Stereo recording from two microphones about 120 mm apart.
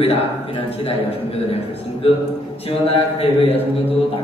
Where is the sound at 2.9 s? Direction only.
60° left (ahead or behind).